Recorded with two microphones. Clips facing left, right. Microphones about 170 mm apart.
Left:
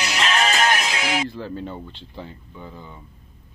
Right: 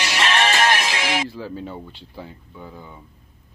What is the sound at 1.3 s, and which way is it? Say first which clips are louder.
Speech: left 1 dB; 5° right (ahead or behind).